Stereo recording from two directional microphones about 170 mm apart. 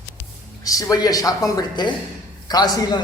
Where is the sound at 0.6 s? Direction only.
20° left (ahead or behind).